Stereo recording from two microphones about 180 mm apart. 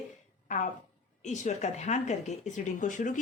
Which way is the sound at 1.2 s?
40° left (ahead or behind).